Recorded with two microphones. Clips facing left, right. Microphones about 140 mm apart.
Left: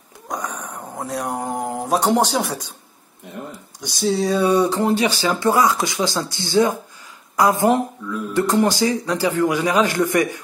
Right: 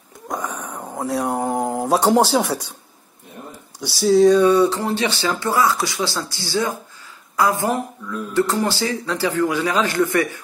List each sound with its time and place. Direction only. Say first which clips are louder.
0.3 s a sound: right 1 dB; 10° right (ahead or behind)
3.8 s speech: right 7 dB; centre (ahead or behind)
4.5 s speech: right 1 dB; 15° left (ahead or behind)